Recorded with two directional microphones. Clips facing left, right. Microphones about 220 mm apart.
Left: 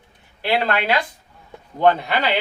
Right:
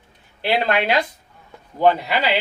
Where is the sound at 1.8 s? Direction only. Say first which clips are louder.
Even; 10° right (ahead or behind).